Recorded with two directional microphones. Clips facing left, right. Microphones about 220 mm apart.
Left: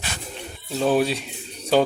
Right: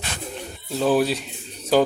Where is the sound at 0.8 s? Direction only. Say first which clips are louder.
Right 1 dB; centre (ahead or behind).